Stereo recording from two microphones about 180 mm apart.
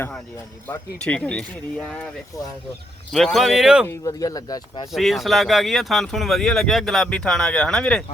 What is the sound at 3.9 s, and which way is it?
Speech, 20° left (ahead or behind).